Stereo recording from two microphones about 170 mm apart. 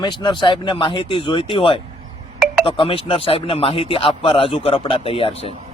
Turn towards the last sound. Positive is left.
turn(degrees=35)  # may be behind; listen again after turning